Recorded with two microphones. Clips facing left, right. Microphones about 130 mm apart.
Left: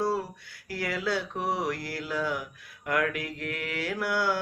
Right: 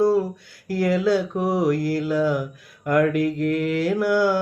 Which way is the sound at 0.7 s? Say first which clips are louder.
Right 10 dB; 45° right (ahead or behind).